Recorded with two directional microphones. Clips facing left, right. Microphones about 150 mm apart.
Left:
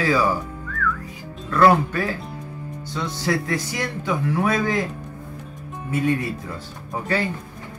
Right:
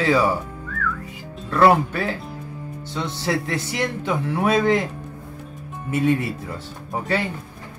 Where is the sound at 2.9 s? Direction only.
25° right (ahead or behind).